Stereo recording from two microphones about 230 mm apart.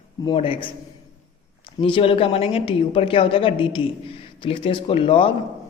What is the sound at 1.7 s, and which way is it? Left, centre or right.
A woman's voice, left.